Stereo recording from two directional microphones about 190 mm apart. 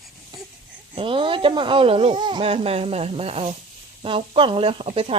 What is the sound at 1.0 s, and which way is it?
Speech, 25° right (ahead or behind).